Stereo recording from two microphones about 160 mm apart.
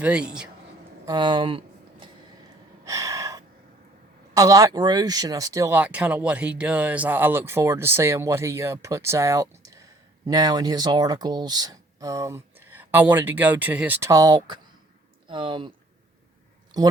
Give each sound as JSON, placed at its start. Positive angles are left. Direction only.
{"t": 0.0, "sound": "speech", "side_deg": -5}
{"t": 1.0, "sound": "a sound", "side_deg": -25}
{"t": 2.8, "sound": "gasp", "side_deg": -20}
{"t": 4.4, "sound": "speech", "side_deg": -20}
{"t": 16.7, "sound": "speech", "side_deg": -25}